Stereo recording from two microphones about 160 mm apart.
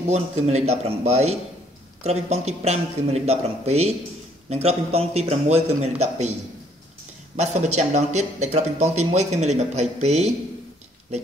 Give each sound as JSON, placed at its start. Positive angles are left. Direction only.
{"t": 0.1, "sound": "speech", "side_deg": -45}
{"t": 7.3, "sound": "speech", "side_deg": -45}